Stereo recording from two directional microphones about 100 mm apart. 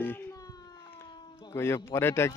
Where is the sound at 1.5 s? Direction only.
25° left (ahead or behind).